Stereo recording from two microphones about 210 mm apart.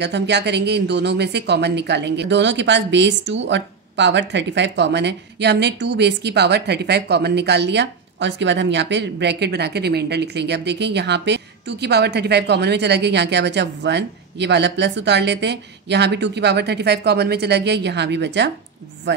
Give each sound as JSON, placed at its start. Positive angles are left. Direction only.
{"t": 0.0, "sound": "speech", "side_deg": -55}